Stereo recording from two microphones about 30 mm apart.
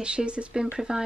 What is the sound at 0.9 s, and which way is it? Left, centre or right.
Speech, right.